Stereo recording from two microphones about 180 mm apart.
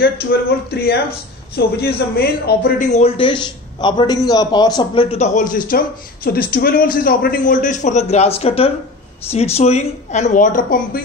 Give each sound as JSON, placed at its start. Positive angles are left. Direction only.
{"t": 0.0, "sound": "a man's voice", "side_deg": 60}
{"t": 2.8, "sound": "a man's voice", "side_deg": 40}
{"t": 5.1, "sound": "a woman's voice", "side_deg": 40}